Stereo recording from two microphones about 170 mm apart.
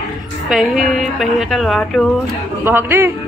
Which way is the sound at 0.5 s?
Centre (ahead or behind).